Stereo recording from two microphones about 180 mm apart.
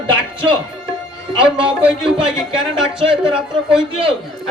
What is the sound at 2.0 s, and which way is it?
Speech, 30° right (ahead or behind).